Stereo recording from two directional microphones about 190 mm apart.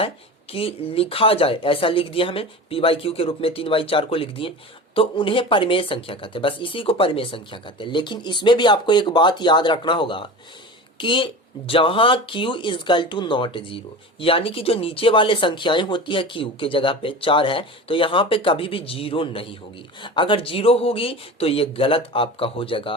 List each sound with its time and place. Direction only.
0.5 s speech: 30° left (ahead or behind)